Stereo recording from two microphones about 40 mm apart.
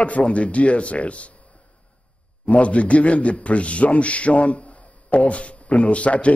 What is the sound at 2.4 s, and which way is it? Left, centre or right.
A man's voice, left.